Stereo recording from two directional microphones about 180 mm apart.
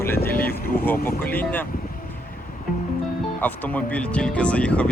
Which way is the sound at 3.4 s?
10° left (ahead or behind).